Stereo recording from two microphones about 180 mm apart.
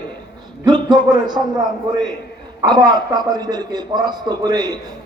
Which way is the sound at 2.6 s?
25° right (ahead or behind).